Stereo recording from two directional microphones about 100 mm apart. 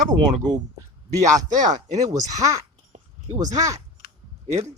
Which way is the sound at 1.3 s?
40° right (ahead or behind).